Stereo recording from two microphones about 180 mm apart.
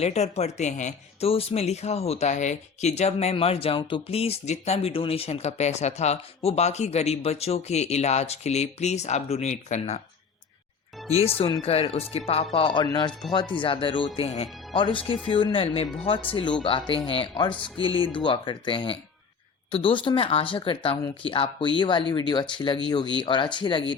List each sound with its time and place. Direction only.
0.0 s speech: 35° left (ahead or behind)
11.3 s speech: 30° left (ahead or behind)